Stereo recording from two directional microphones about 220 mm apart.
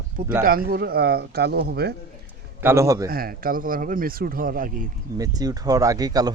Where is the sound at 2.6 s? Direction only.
10° right (ahead or behind).